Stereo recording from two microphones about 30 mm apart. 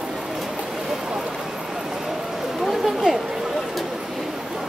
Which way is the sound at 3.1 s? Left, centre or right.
Right.